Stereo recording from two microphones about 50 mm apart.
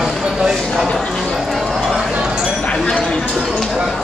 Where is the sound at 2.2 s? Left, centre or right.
Centre.